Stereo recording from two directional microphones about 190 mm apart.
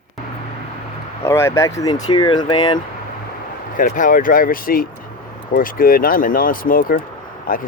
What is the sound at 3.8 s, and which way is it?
Speech, 45° left (ahead or behind).